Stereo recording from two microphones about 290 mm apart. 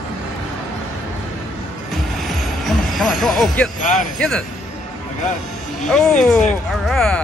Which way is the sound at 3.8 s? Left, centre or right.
Left.